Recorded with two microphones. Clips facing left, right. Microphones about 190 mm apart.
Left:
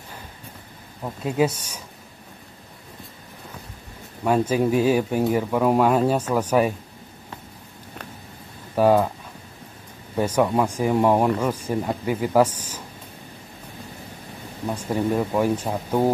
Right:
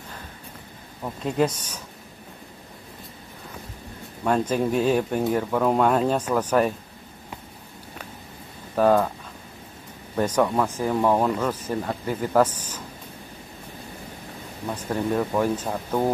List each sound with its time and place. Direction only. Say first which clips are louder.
1.0 s speech: left 1 dB; 5° left (ahead or behind)
4.2 s speech: left 2 dB; 5° left (ahead or behind)
8.7 s speech: left 1 dB; 10° left (ahead or behind)
10.1 s speech: left 1 dB; 10° left (ahead or behind)
14.7 s speech: left 2 dB; 10° left (ahead or behind)